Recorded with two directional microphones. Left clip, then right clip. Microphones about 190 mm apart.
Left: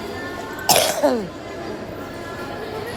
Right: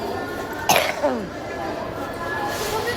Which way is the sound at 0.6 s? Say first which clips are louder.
Left 2 dB; 25° left (ahead or behind).